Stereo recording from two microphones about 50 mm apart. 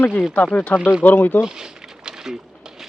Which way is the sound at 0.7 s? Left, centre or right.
Centre.